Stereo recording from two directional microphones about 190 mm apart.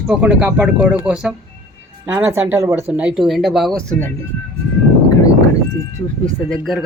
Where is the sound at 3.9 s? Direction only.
10° left (ahead or behind).